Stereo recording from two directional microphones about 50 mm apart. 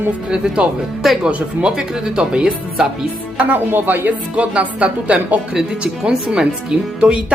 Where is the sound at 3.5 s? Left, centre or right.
Right.